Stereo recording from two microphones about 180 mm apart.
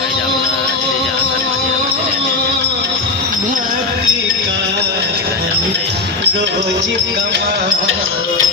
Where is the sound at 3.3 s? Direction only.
50° right (ahead or behind).